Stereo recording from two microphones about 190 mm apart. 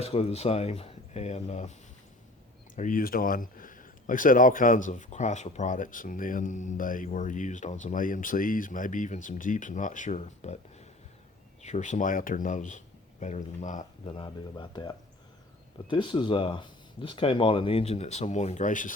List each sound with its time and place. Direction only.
0.0 s speech: 35° left (ahead or behind)
2.7 s speech: 45° left (ahead or behind)
14.2 s speech: 25° left (ahead or behind); by 18.9 s 45° left (ahead or behind)